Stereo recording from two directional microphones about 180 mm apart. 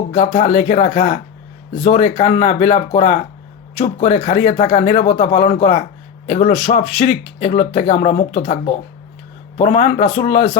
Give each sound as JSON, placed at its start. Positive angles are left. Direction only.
{"t": 0.1, "sound": "speech", "side_deg": 40}